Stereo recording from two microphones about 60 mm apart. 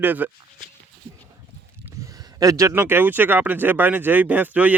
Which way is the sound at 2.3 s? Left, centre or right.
Right.